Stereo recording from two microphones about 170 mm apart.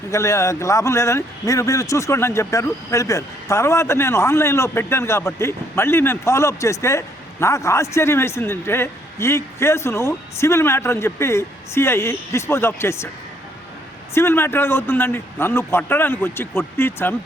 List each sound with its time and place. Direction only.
0.1 s a man's voice: 15° left (ahead or behind)
14.1 s a man's voice: 15° left (ahead or behind)